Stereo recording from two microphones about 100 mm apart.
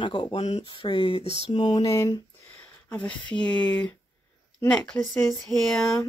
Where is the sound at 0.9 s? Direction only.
60° left (ahead or behind).